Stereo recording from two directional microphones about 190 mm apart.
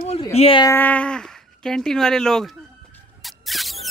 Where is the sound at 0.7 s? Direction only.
10° left (ahead or behind).